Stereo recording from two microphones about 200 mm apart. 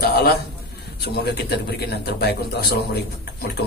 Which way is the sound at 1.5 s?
55° left (ahead or behind).